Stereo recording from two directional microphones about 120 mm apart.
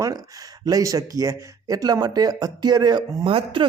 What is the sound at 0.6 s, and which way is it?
Speech, 30° right (ahead or behind).